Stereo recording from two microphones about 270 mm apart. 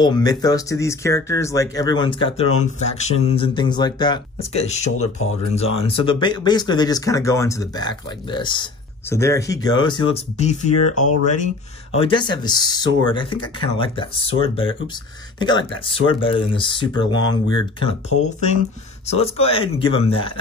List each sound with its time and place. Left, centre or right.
0.0 s speech: centre
19.1 s speech: left